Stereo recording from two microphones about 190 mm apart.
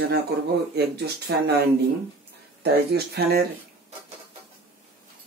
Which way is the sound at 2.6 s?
55° right (ahead or behind).